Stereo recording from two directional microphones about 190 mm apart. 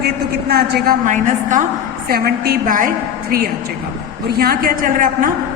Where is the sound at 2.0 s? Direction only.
55° right (ahead or behind).